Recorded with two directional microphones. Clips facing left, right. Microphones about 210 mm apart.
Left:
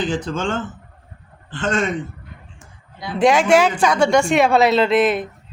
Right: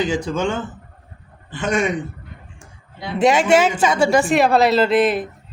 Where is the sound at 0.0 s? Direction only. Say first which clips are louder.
Right 2 dB; 10° right (ahead or behind).